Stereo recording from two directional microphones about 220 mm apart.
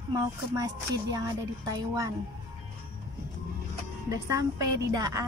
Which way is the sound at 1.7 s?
15° right (ahead or behind).